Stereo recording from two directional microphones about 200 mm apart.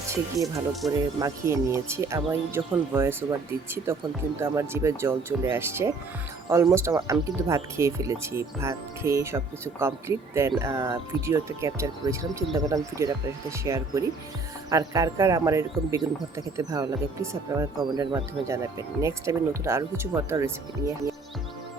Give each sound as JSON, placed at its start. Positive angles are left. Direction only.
{"t": 0.1, "sound": "speech", "side_deg": -15}
{"t": 0.8, "sound": "speech", "side_deg": 0}
{"t": 1.2, "sound": "speech", "side_deg": -15}